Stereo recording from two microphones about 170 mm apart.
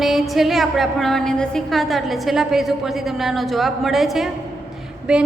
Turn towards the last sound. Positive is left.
turn(degrees=-5)  # may be behind; listen again after turning